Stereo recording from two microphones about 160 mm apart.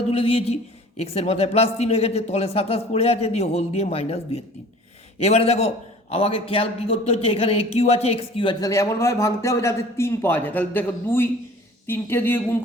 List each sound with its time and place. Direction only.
0.1 s speech: 35° left (ahead or behind)
8.7 s a man's voice: 20° left (ahead or behind)